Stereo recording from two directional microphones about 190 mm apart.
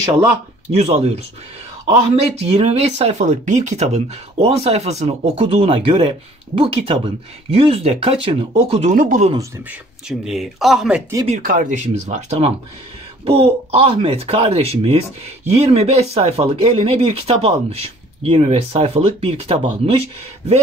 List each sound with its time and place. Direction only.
0.7 s speech: 35° right (ahead or behind)
8.9 s speech: 45° right (ahead or behind)
9.7 s speech: 5° right (ahead or behind)
11.4 s speech: 45° right (ahead or behind)